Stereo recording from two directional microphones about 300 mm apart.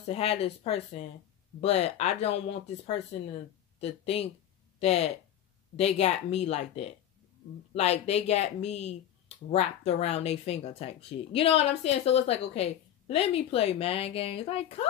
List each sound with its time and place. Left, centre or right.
0.0 s speech: centre
3.8 s speech: centre